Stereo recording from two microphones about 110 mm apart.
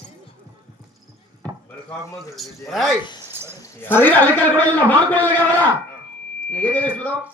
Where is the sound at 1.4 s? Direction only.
10° left (ahead or behind).